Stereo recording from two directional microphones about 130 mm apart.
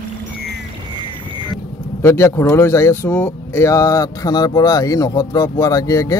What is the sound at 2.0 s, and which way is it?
Speech, 20° left (ahead or behind).